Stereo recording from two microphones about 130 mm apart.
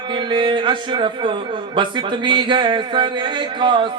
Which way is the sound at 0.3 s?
40° right (ahead or behind).